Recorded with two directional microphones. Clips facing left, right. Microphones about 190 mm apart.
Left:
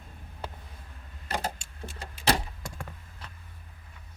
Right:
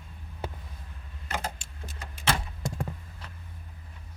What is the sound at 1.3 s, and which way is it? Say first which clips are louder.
Vehicle: left 2 dB; 35° left (ahead or behind).